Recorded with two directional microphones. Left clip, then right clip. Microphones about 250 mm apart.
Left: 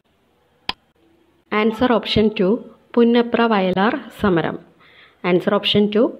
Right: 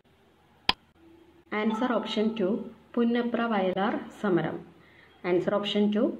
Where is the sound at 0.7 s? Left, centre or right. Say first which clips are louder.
Even; centre.